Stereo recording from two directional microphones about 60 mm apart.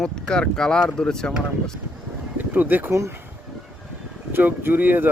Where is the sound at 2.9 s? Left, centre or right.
Right.